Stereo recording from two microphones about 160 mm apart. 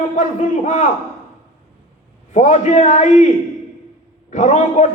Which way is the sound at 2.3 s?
50° left (ahead or behind).